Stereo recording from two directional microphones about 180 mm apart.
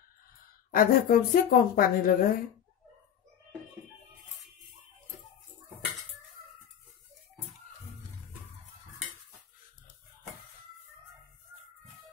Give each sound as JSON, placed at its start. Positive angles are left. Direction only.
{"t": 0.7, "sound": "a woman's voice", "side_deg": 55}